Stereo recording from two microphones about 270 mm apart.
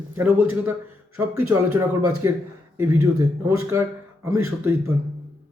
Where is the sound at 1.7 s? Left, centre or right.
Right.